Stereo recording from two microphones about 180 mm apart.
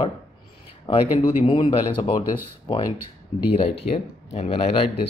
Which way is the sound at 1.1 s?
30° left (ahead or behind).